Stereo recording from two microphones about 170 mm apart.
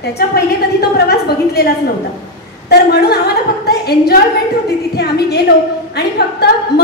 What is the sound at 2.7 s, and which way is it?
A woman's voice, 70° left (ahead or behind).